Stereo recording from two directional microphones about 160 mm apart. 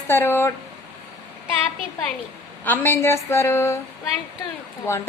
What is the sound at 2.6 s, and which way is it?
A woman's voice, 10° left (ahead or behind).